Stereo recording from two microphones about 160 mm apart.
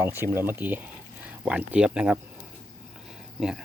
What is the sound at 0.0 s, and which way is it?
Speech, 15° right (ahead or behind).